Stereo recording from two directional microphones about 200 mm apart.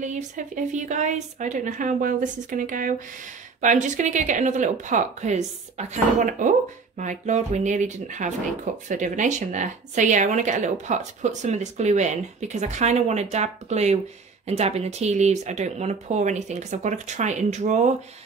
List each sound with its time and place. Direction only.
0.0 s a woman's voice: 40° right (ahead or behind)